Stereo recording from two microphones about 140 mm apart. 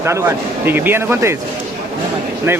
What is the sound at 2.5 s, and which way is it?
Speech, 20° right (ahead or behind).